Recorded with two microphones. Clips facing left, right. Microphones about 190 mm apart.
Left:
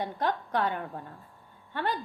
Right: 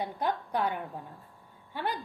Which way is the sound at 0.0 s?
10° right (ahead or behind).